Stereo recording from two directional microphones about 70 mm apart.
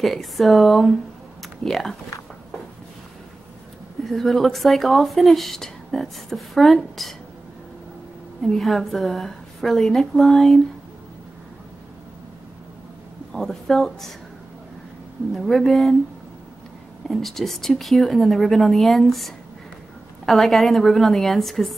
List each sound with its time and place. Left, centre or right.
0.0 s speech: centre
4.0 s speech: centre
8.5 s speech: centre
13.3 s speech: centre
15.3 s speech: centre
17.1 s speech: centre